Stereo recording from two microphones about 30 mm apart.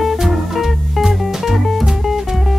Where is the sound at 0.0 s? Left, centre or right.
Centre.